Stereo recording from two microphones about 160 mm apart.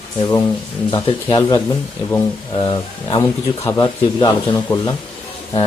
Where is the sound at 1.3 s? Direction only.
25° left (ahead or behind).